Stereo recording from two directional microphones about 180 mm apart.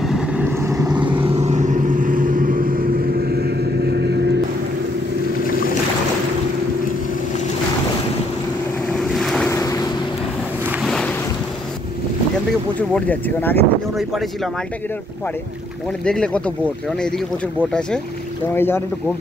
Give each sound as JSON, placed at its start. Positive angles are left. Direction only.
{"t": 0.0, "sound": "vehicle", "side_deg": -5}
{"t": 9.1, "sound": "boat", "side_deg": 0}
{"t": 9.5, "sound": "boat", "side_deg": 20}
{"t": 10.8, "sound": "boat", "side_deg": 5}
{"t": 12.7, "sound": "speech", "side_deg": 10}
{"t": 13.9, "sound": "speech", "side_deg": 0}
{"t": 16.1, "sound": "speech", "side_deg": 5}
{"t": 17.6, "sound": "speech", "side_deg": 5}